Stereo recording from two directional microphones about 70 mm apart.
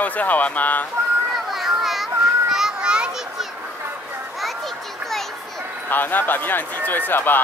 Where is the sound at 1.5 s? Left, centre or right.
Centre.